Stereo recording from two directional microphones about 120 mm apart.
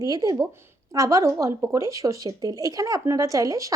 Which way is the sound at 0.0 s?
30° right (ahead or behind).